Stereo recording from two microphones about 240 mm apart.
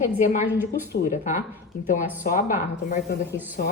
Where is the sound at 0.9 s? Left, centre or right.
Left.